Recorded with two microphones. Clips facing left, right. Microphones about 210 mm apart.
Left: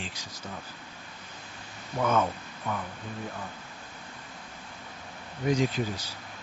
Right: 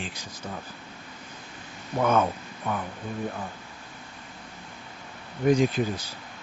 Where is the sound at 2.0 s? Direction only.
55° right (ahead or behind).